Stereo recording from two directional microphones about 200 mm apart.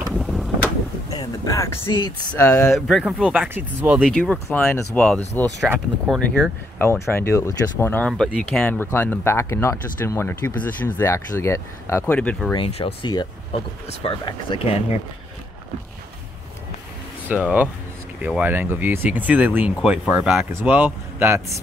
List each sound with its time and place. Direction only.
0.1 s vehicle: centre (ahead or behind)
1.1 s a sound: 20° left (ahead or behind)
2.3 s speech: 15° left (ahead or behind)
2.6 s speech: centre (ahead or behind)
4.0 s speech: 5° left (ahead or behind)
6.8 s speech: 10° left (ahead or behind)
12.5 s speech: 25° left (ahead or behind)
17.3 s speech: 5° right (ahead or behind)